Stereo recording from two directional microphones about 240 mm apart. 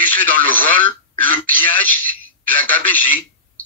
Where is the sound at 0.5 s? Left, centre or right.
Centre.